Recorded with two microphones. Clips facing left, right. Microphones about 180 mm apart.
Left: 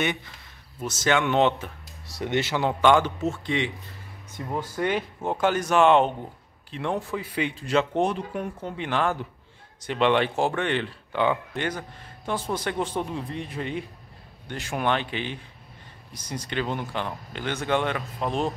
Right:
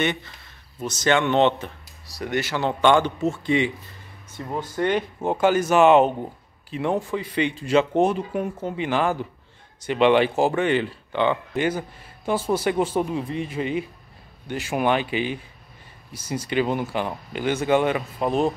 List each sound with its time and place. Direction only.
0.0 s speech: 10° left (ahead or behind)
2.0 s speech: 25° left (ahead or behind)
2.7 s speech: 5° left (ahead or behind)